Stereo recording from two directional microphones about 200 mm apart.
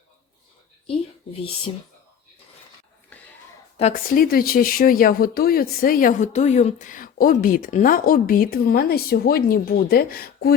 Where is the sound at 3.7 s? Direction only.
35° left (ahead or behind).